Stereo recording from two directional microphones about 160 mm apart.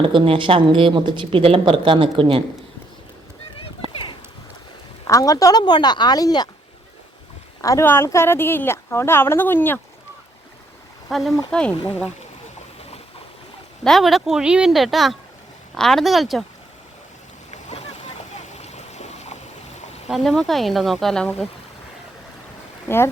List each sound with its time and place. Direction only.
0.1 s speech: 30° right (ahead or behind)
5.0 s speech: 20° left (ahead or behind)
7.6 s speech: 20° left (ahead or behind)
11.1 s speech: centre (ahead or behind)
13.8 s speech: centre (ahead or behind)
17.5 s boat: 45° left (ahead or behind)
20.1 s speech: centre (ahead or behind)